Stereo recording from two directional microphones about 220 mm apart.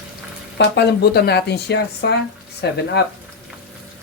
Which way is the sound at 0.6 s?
50° left (ahead or behind).